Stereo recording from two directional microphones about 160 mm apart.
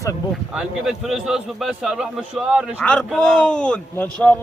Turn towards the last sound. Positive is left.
turn(degrees=10)  # may be behind; listen again after turning